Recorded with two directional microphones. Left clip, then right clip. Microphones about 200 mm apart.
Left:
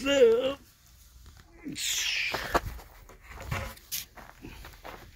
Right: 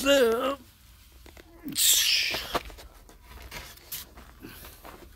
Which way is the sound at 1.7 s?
35° right (ahead or behind).